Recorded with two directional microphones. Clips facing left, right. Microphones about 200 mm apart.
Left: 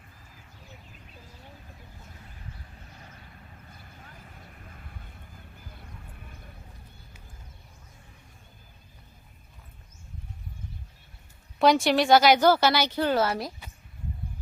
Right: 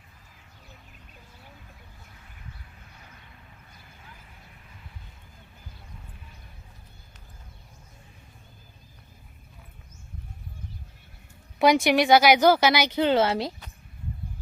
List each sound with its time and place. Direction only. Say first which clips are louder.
11.6 s a woman's voice: right 1 dB; 15° right (ahead or behind)